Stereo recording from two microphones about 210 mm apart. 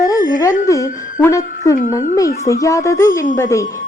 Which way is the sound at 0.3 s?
15° left (ahead or behind).